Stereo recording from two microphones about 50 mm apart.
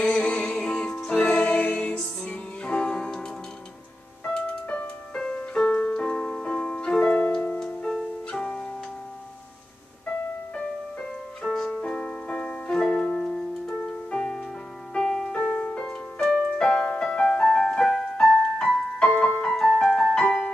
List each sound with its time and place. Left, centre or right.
0.0 s music: left
5.1 s music: centre
10.0 s music: centre
19.0 s music: left
19.5 s music: centre
20.2 s music: centre